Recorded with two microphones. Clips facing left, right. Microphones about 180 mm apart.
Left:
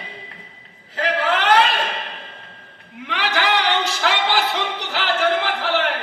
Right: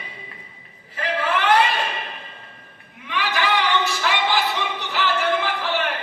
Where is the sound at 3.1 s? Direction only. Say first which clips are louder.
Left 2 dB; 85° left.